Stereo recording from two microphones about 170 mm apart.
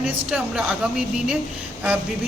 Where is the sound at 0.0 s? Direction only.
5° right (ahead or behind).